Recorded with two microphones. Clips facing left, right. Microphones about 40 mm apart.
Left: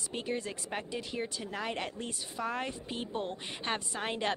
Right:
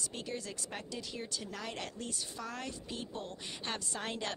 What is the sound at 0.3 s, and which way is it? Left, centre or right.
Speech, left.